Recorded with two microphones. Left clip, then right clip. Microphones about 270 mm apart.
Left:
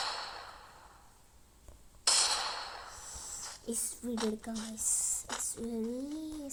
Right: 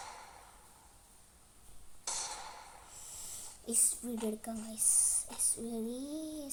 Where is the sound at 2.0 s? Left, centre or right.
Left.